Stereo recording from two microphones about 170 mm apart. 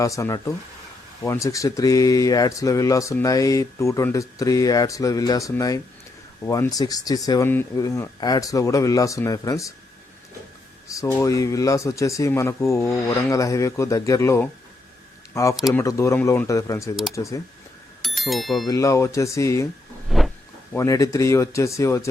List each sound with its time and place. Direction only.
0.0 s speech: 20° left (ahead or behind)
10.9 s speech: 20° left (ahead or behind)
18.0 s speech: centre (ahead or behind)
18.7 s speech: 20° left (ahead or behind)
20.1 s a sound: centre (ahead or behind)
20.7 s speech: 20° left (ahead or behind)